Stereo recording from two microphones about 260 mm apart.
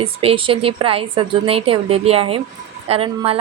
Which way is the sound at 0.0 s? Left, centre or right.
Right.